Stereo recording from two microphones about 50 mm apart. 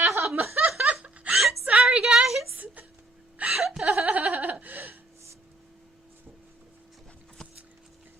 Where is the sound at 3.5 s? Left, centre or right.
Centre.